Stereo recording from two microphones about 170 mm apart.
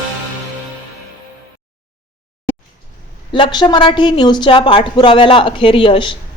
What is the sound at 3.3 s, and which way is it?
A woman's voice, 30° left (ahead or behind).